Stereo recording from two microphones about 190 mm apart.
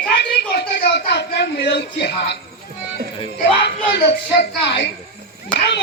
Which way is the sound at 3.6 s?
60° left (ahead or behind).